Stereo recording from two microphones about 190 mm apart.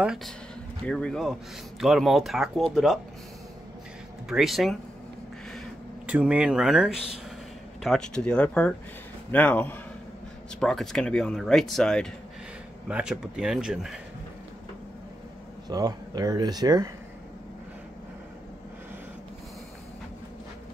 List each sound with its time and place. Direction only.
0.0 s speech: 5° right (ahead or behind)
4.3 s speech: centre (ahead or behind)
6.0 s a man's voice: 5° right (ahead or behind)
15.7 s speech: 20° right (ahead or behind)